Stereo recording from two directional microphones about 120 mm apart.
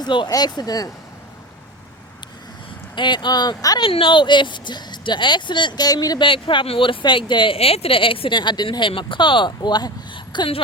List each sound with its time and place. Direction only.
0.0 s speech: 40° left (ahead or behind)
2.9 s speech: 40° left (ahead or behind)
3.8 s speech: 45° left (ahead or behind)
6.2 s speech: 45° left (ahead or behind)